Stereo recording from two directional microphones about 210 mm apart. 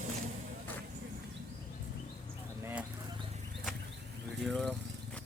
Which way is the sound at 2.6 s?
5° right (ahead or behind).